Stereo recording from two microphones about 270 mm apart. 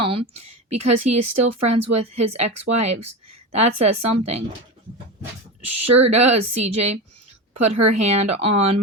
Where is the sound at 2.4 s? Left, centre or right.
Right.